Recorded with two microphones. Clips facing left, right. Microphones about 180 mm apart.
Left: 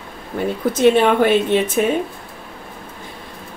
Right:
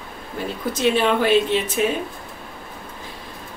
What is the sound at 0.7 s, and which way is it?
Speech, 55° left (ahead or behind).